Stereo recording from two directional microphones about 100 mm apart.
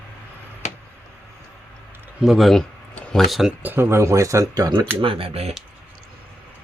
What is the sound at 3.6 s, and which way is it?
Speech, 20° right (ahead or behind).